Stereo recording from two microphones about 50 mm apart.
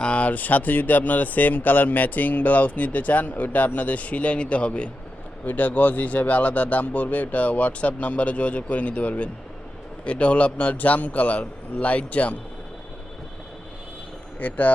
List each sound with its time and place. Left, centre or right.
0.0 s speech: left
5.5 s a man's voice: left
14.3 s speech: left